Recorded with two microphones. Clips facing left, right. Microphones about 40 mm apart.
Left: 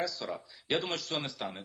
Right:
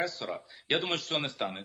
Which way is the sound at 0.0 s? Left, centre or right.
Right.